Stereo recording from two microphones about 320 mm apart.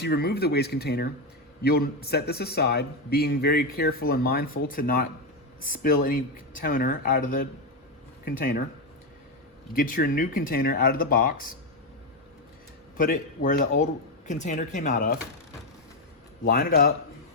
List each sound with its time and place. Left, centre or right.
0.0 s a man's voice: left
9.7 s a man's voice: left
13.0 s a man's voice: left
16.4 s a man's voice: left